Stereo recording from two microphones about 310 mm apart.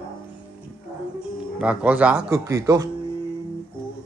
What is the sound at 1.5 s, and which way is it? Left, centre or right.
Speech, centre.